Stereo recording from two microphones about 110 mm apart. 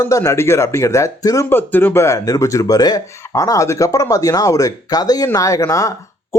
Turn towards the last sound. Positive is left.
turn(degrees=30)  # may be behind; listen again after turning